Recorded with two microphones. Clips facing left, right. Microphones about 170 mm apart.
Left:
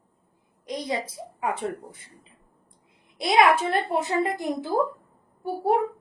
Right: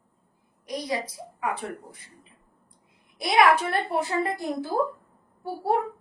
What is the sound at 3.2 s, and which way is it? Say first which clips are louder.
A woman's voice: left 1 dB; 20° left (ahead or behind).